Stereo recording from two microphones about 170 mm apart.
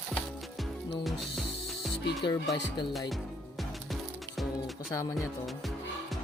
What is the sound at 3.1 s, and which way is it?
Music, centre (ahead or behind).